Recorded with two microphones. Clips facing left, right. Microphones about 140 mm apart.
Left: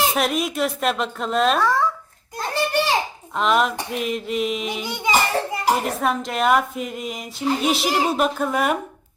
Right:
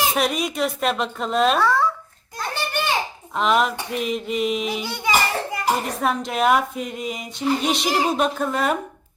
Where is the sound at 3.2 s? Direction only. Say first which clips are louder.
Even; centre (ahead or behind).